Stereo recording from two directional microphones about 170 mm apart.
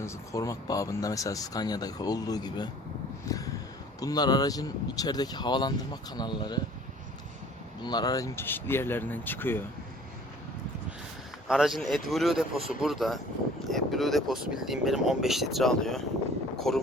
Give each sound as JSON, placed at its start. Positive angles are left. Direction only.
{"t": 0.0, "sound": "speech", "side_deg": 15}
{"t": 7.8, "sound": "speech", "side_deg": 25}
{"t": 11.4, "sound": "speech", "side_deg": -5}